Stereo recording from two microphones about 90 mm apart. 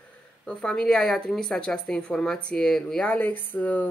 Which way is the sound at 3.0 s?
15° left (ahead or behind).